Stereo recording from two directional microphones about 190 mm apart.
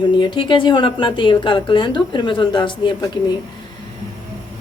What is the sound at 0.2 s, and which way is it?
Speech, 25° left (ahead or behind).